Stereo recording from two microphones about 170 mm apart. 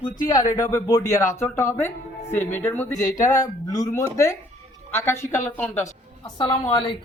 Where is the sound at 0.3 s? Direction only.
20° left (ahead or behind).